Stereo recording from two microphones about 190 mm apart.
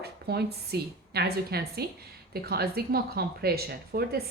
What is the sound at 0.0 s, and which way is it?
A woman's voice, 55° right (ahead or behind).